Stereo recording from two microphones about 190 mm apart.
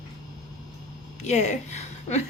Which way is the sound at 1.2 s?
35° left (ahead or behind).